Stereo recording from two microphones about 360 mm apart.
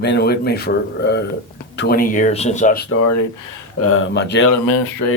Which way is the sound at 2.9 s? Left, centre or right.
Left.